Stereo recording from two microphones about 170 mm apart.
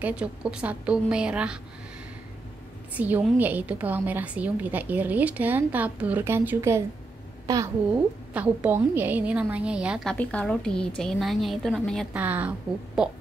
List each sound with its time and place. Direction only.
0.0 s a woman's voice: 5° right (ahead or behind)
2.9 s a woman's voice: 10° right (ahead or behind)
8.3 s a woman's voice: 10° right (ahead or behind)
10.1 s a woman's voice: 5° left (ahead or behind)
12.1 s a woman's voice: 10° right (ahead or behind)